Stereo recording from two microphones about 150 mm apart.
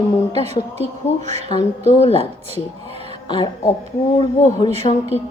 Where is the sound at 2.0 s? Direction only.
40° left (ahead or behind).